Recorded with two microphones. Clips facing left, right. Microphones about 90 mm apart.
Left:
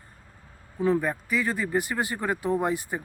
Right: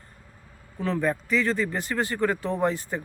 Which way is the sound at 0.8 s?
15° left (ahead or behind).